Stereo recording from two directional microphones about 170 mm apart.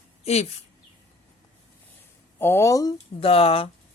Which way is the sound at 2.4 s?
15° left (ahead or behind).